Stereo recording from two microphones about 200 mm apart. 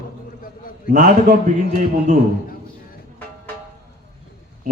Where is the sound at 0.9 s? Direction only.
40° right (ahead or behind).